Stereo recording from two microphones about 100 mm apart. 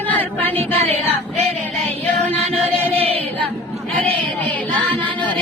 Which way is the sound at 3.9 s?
10° left (ahead or behind).